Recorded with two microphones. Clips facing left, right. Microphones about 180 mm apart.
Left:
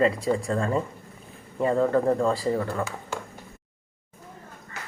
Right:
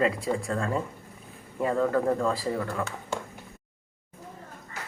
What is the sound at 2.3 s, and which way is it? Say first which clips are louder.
Speech: left 4 dB; centre (ahead or behind).